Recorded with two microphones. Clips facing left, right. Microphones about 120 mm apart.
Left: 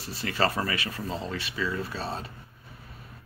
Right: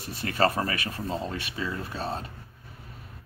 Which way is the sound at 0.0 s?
50° right (ahead or behind).